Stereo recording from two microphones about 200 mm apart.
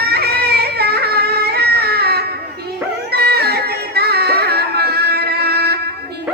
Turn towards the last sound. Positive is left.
turn(degrees=-55)  # may be behind; listen again after turning